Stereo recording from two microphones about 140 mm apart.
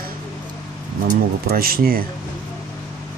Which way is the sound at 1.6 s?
90° right.